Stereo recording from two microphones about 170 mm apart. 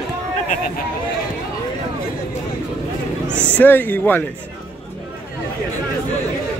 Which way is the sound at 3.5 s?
10° left (ahead or behind).